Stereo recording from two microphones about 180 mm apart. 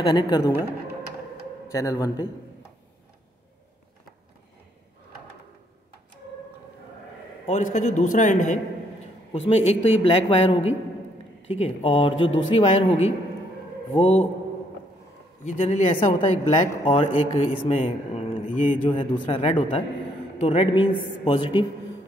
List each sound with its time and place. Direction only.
0.0 s speech: 25° left (ahead or behind)
1.7 s a man's voice: 20° left (ahead or behind)
7.4 s a man's voice: 40° left (ahead or behind)
12.3 s speech: 90° left
12.5 s speech: 35° left (ahead or behind)
15.6 s speech: 35° left (ahead or behind)
16.7 s speech: 25° left (ahead or behind)
17.0 s speech: 35° left (ahead or behind)
18.9 s speech: 30° left (ahead or behind)
21.3 s speech: 25° left (ahead or behind)